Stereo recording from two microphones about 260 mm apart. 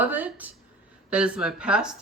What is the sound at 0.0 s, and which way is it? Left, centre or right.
A woman's voice, centre.